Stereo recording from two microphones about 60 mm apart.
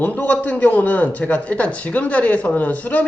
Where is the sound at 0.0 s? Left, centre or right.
Left.